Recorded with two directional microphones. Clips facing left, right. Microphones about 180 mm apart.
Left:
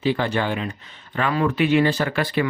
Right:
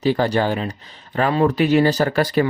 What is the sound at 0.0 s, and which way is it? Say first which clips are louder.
Speech: right 4 dB; 40° right (ahead or behind).